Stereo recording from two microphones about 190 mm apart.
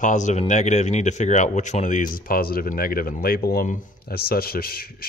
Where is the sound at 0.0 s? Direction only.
40° left (ahead or behind).